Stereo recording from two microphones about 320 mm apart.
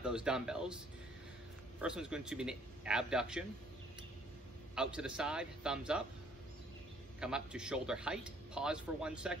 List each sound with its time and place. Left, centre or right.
0.0 s a man's voice: centre
1.8 s a man's voice: centre
4.7 s a man's voice: centre
7.2 s a man's voice: centre